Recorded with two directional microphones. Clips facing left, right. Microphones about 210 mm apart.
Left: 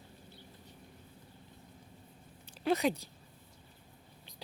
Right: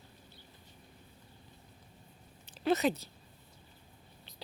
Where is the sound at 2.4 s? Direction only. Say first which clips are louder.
Right 1 dB; 10° left (ahead or behind).